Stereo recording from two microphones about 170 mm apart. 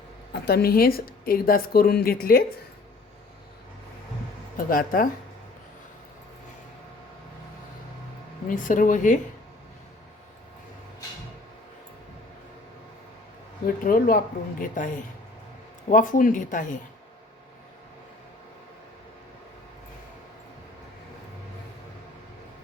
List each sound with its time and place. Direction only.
0.4 s speech: 65° left (ahead or behind)
4.5 s speech: 55° left (ahead or behind)
8.4 s speech: 50° left (ahead or behind)
13.8 s speech: 55° left (ahead or behind)